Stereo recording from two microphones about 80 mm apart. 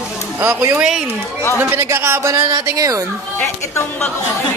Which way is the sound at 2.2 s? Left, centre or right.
Right.